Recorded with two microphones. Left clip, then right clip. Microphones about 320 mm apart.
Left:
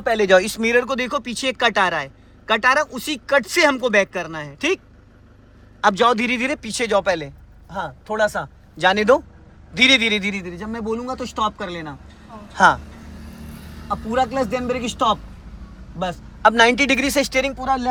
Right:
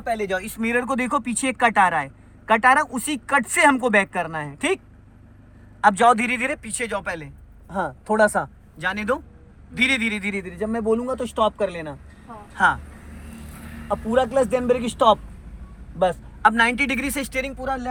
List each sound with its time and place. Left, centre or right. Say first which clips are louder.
0.0 s speech: left 9 dB; left; by 4.8 s centre
5.8 s speech: even; centre
7.7 s speech: right 2 dB; centre
8.8 s speech: left 9 dB; centre
12.5 s speech: left 5 dB; centre
14.1 s speech: right 1 dB; centre